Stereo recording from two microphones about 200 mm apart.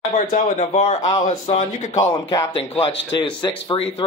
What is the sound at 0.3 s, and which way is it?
Speech, 30° left (ahead or behind).